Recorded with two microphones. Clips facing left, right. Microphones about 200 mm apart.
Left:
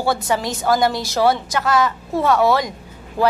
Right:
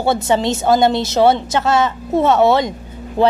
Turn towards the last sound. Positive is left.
turn(degrees=-25)  # may be behind; listen again after turning